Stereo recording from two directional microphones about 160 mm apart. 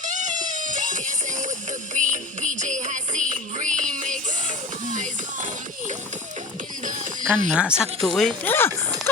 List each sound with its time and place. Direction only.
0.0 s music: 50° right (ahead or behind)
6.8 s a sound: 55° right (ahead or behind)
7.5 s speech: 5° right (ahead or behind); by 8.7 s 15° left (ahead or behind)